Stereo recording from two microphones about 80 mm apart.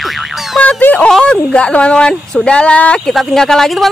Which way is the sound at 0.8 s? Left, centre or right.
Left.